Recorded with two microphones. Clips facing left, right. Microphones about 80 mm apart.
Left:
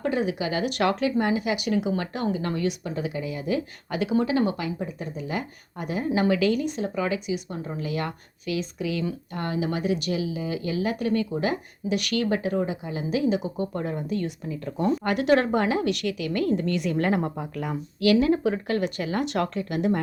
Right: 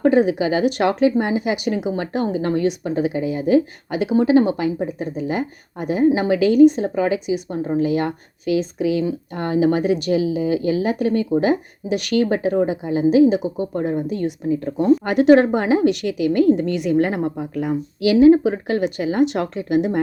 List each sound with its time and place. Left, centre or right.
0.0 s speech: right
14.4 s speech: right
14.8 s a woman's voice: centre